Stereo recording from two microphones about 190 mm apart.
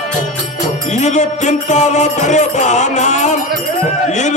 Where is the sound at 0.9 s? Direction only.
40° left (ahead or behind).